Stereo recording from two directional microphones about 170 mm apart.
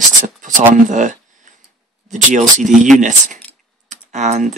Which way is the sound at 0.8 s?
45° right (ahead or behind).